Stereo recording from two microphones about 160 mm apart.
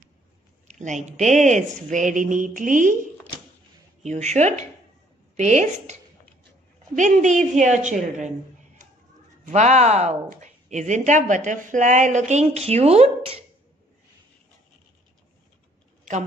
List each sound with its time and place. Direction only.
0.7 s speech: 45° right (ahead or behind)
4.0 s speech: 45° right (ahead or behind)
7.0 s speech: 50° right (ahead or behind)
9.5 s speech: 45° right (ahead or behind)